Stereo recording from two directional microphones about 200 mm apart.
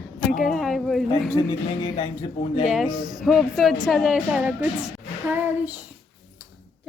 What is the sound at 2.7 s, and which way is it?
A woman's voice, centre (ahead or behind).